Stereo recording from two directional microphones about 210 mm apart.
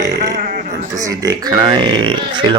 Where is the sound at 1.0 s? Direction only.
15° right (ahead or behind).